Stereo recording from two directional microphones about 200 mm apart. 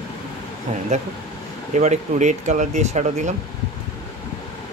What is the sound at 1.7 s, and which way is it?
Speech, 35° right (ahead or behind).